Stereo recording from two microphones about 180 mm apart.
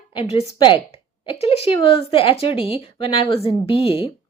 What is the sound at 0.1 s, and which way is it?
A woman's voice, 30° left (ahead or behind).